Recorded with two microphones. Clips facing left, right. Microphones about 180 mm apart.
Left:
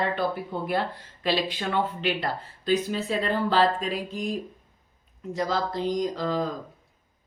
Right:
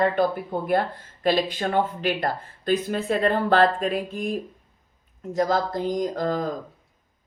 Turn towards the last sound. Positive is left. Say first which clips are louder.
# right 2 dB
turn(degrees=-50)  # may be behind; listen again after turning